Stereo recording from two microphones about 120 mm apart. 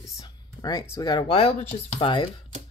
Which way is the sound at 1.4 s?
55° left (ahead or behind).